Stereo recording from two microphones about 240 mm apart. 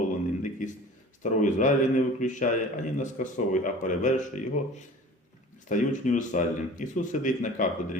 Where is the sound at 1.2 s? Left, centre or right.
Left.